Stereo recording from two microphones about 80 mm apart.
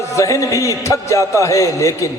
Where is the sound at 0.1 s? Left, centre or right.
Left.